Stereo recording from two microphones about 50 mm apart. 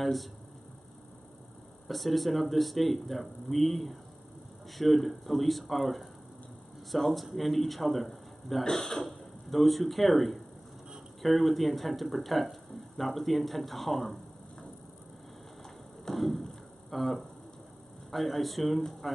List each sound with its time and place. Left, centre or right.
0.0 s speech: centre
1.9 s speech: centre
16.1 s a sound: centre
18.1 s speech: centre